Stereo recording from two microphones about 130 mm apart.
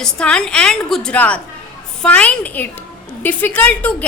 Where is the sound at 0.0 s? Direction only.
5° left (ahead or behind).